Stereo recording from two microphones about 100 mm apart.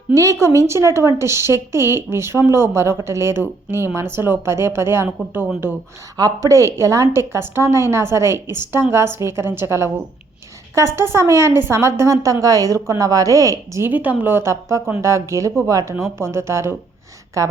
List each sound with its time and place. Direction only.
0.1 s speech: 30° right (ahead or behind)
6.1 s a woman's voice: 35° right (ahead or behind)
13.8 s a woman's voice: 15° right (ahead or behind); by 17.5 s 30° right (ahead or behind)